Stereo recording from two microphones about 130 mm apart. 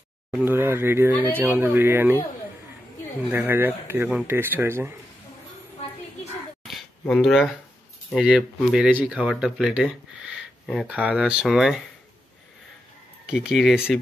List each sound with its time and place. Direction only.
0.3 s speech: 10° right (ahead or behind)
3.3 s speech: 15° right (ahead or behind)
6.7 s a sound: centre (ahead or behind)
8.1 s speech: 5° right (ahead or behind)
13.3 s speech: 5° right (ahead or behind)